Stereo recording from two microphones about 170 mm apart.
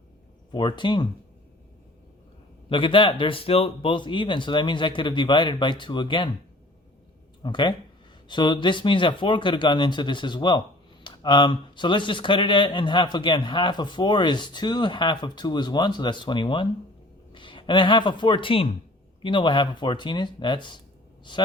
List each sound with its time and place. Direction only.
0.5 s speech: 25° left (ahead or behind)
2.6 s speech: 30° left (ahead or behind)
7.4 s speech: 25° left (ahead or behind)